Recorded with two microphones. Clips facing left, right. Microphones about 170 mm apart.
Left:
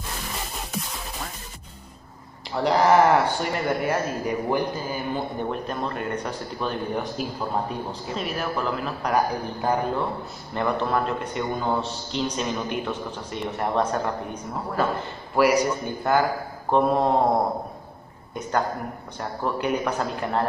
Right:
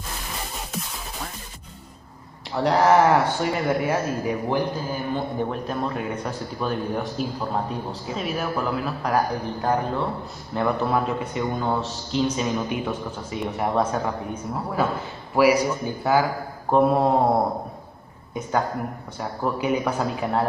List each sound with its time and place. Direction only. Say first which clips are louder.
2.5 s speech: right 1 dB; centre (ahead or behind)
19.1 s speech: right 1 dB; 5° right (ahead or behind)